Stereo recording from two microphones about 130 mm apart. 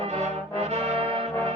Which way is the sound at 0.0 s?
55° right (ahead or behind).